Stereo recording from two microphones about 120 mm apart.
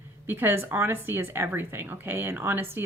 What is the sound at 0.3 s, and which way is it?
Speech, 15° right (ahead or behind).